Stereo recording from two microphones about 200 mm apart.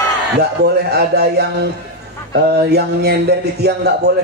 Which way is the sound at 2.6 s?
55° right (ahead or behind).